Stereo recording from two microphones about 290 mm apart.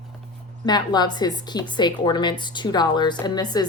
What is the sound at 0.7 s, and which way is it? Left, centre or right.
A woman's voice, centre.